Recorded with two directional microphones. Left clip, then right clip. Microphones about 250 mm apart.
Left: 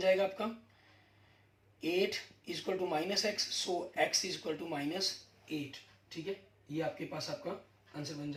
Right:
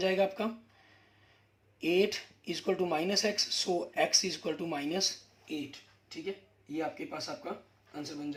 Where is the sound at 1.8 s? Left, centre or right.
Right.